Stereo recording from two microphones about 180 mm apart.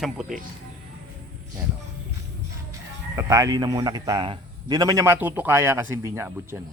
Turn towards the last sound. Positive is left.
turn(degrees=-15)  # may be behind; listen again after turning